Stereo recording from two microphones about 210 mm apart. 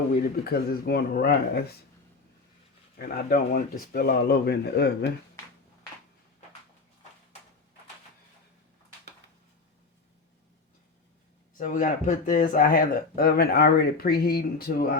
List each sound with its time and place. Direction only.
0.2 s speech: 45° left (ahead or behind)
3.0 s speech: 45° left (ahead or behind)
11.5 s speech: 40° left (ahead or behind)